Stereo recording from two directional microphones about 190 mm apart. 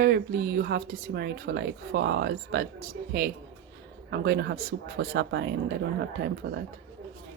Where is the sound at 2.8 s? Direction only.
50° right (ahead or behind).